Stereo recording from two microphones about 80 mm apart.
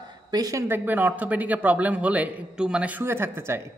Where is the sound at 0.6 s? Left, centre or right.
Right.